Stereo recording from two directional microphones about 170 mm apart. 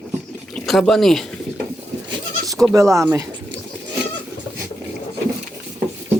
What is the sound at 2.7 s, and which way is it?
Speech, 15° right (ahead or behind).